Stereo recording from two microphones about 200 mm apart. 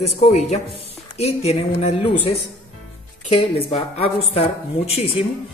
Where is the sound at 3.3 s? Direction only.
25° left (ahead or behind).